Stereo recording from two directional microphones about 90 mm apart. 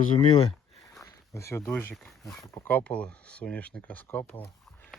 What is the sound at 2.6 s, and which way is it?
Speech, 15° left (ahead or behind).